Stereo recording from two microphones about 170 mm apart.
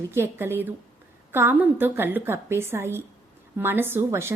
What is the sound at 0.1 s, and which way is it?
A woman's voice, 15° right (ahead or behind).